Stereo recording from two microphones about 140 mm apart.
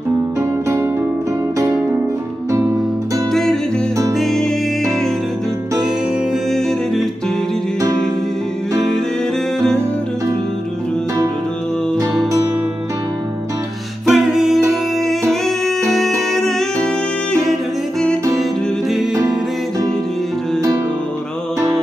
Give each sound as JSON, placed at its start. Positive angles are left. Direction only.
{"t": 4.2, "sound": "music", "side_deg": 5}
{"t": 14.0, "sound": "music", "side_deg": -5}